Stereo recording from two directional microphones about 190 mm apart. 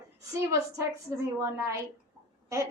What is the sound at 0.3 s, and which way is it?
Speech, 15° right (ahead or behind).